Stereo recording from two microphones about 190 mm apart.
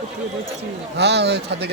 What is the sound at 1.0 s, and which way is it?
Speech, 65° right (ahead or behind).